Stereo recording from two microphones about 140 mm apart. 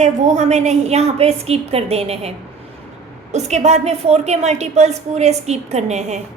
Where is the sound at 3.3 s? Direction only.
55° right (ahead or behind).